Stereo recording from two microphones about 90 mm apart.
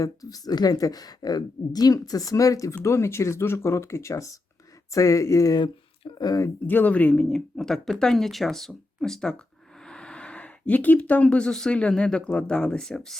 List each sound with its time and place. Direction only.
0.0 s a woman's voice: 40° left (ahead or behind)
5.5 s speech: 55° left (ahead or behind)
6.7 s speech: 20° left (ahead or behind)